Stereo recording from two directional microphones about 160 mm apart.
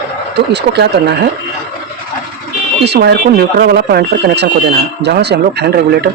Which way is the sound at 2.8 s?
90° right.